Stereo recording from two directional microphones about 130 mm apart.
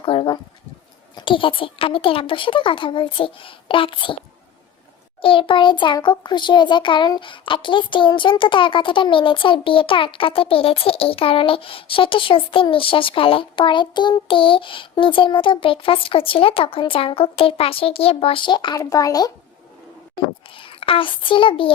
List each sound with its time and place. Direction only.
0.0 s a sound: 40° left (ahead or behind)
1.1 s a child's voice: 40° left (ahead or behind)
5.2 s a child's voice: 40° left (ahead or behind)
20.5 s a child's voice: 45° left (ahead or behind)